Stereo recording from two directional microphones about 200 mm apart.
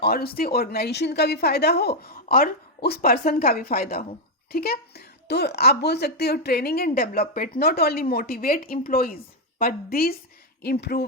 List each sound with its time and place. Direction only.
0.0 s speech: 50° left (ahead or behind)